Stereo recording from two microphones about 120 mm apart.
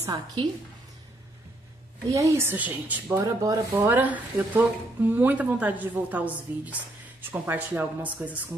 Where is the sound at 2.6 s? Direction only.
15° right (ahead or behind); by 3.9 s 30° right (ahead or behind).